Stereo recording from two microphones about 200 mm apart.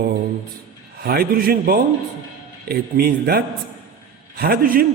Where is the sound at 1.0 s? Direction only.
50° right (ahead or behind).